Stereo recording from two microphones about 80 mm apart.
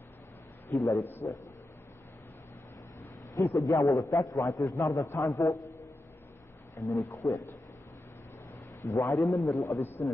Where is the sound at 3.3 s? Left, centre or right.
Left.